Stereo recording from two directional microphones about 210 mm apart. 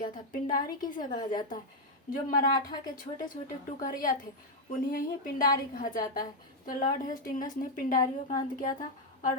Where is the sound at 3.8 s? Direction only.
40° left (ahead or behind).